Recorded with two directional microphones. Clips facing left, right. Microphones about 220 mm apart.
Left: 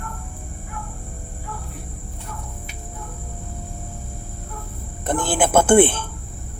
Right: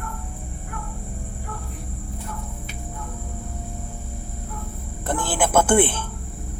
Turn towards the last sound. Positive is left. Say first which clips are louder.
# left 4 dB
turn(degrees=25)  # may be behind; listen again after turning